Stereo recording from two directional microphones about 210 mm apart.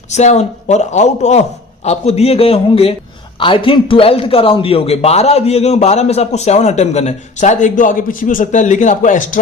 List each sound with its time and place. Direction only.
0.1 s a man's voice: 35° left (ahead or behind)